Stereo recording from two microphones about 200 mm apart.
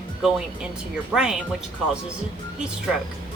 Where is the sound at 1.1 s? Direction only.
5° right (ahead or behind).